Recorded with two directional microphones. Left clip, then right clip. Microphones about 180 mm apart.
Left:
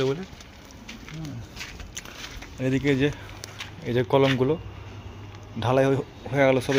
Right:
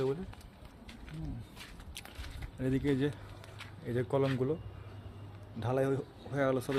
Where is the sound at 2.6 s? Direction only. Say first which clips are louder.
Left 9 dB; 15° right (ahead or behind).